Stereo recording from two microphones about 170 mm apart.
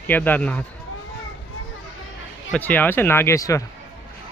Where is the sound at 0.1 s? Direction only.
10° left (ahead or behind).